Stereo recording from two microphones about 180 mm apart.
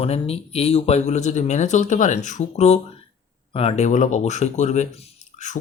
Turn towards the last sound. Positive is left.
turn(degrees=40)  # may be behind; listen again after turning